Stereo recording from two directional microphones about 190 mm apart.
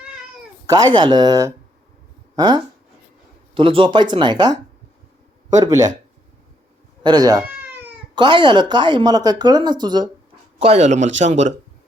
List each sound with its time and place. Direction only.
0.9 s speech: 25° right (ahead or behind)
5.6 s speech: 20° right (ahead or behind)
7.0 s speech: 20° right (ahead or behind)
7.5 s cat: 10° right (ahead or behind)
8.1 s speech: 25° right (ahead or behind)
10.6 s speech: 35° right (ahead or behind)